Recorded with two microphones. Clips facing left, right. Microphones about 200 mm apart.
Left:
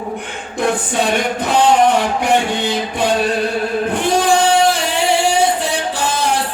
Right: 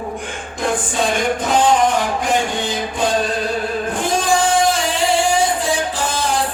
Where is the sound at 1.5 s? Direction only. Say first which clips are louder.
Left 3 dB; 65° left (ahead or behind).